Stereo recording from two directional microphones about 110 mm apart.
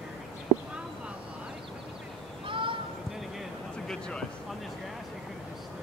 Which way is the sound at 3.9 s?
5° left (ahead or behind).